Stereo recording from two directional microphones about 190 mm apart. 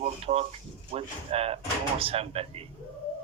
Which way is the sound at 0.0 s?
35° right (ahead or behind).